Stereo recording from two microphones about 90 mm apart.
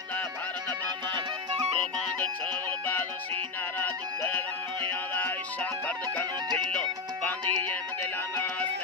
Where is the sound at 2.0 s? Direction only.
15° left (ahead or behind).